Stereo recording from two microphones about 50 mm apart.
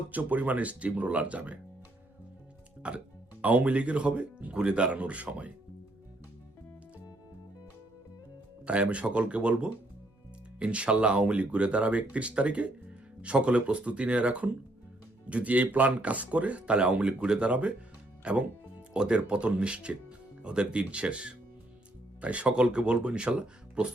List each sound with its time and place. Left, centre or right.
0.1 s speech: right
2.8 s speech: right
8.6 s speech: right